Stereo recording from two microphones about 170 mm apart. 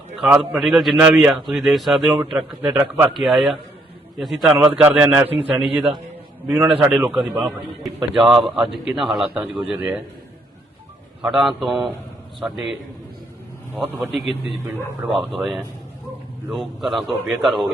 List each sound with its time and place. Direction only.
0.2 s a man's voice: 5° right (ahead or behind)
2.6 s a man's voice: 15° right (ahead or behind)
3.1 s a man's voice: centre (ahead or behind)
11.2 s a man's voice: 5° right (ahead or behind)
13.7 s a man's voice: 5° right (ahead or behind)